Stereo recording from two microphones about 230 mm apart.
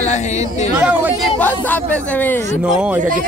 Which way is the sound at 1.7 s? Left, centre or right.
Centre.